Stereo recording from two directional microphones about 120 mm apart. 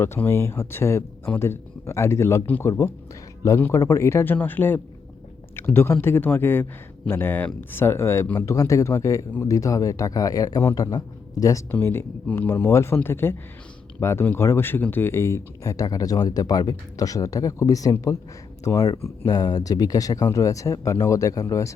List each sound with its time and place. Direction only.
0.0 s speech: 20° left (ahead or behind)